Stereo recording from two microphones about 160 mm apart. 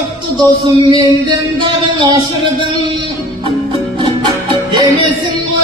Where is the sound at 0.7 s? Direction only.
30° right (ahead or behind).